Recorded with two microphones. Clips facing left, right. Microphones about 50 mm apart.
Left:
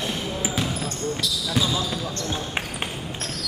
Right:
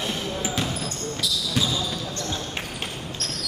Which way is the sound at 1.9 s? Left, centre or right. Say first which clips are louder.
Left 2 dB; left.